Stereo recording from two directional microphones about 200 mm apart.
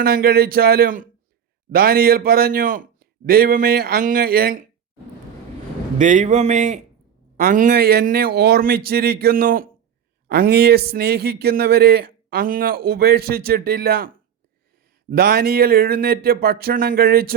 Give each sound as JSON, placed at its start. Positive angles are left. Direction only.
{"t": 0.0, "sound": "a man's voice", "side_deg": -50}
{"t": 6.0, "sound": "a man's voice", "side_deg": -35}
{"t": 15.1, "sound": "a man's voice", "side_deg": -50}